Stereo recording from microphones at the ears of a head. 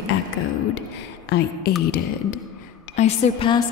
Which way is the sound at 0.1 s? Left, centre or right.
Left.